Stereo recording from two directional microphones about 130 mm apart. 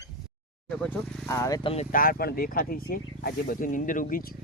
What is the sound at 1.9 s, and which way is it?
Speech, 90° left.